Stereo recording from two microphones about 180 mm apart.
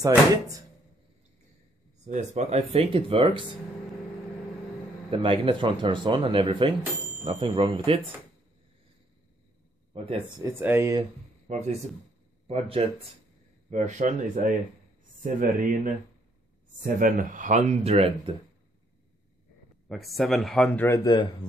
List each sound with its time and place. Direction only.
2.0 s speech: 40° right (ahead or behind)
5.1 s speech: 30° right (ahead or behind)
10.4 s speech: 10° right (ahead or behind)
11.4 s speech: 40° right (ahead or behind)
19.9 s speech: centre (ahead or behind); by 21.3 s 20° left (ahead or behind)